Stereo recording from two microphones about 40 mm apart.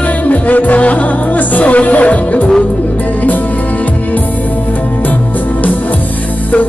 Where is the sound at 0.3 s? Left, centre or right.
Left.